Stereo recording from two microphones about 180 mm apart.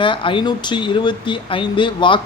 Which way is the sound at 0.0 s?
30° left (ahead or behind).